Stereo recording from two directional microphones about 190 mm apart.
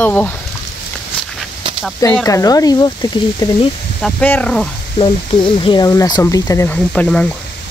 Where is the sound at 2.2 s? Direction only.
20° left (ahead or behind).